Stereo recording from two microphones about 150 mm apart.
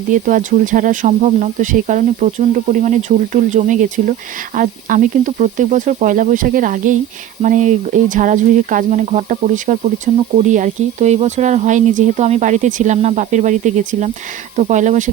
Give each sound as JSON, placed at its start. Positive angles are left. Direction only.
{"t": 0.1, "sound": "speech", "side_deg": -60}